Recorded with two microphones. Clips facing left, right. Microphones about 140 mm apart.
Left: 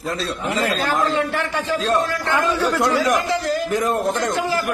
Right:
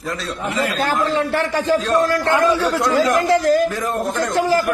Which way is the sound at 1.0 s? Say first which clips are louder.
Right 2 dB; 35° right (ahead or behind).